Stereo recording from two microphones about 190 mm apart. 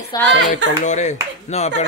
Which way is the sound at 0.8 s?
40° left (ahead or behind).